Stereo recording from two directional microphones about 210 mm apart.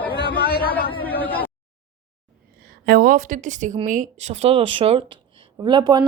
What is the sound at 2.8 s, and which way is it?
A woman's voice, 45° right (ahead or behind).